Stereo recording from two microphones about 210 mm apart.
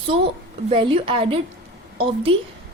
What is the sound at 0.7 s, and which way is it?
Speech, 25° right (ahead or behind).